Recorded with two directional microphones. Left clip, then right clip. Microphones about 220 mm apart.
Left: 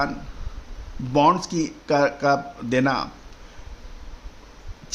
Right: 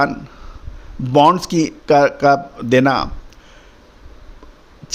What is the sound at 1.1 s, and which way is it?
A man's voice, 35° right (ahead or behind).